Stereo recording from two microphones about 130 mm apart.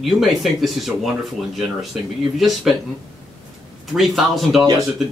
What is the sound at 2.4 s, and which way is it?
Speech, centre (ahead or behind).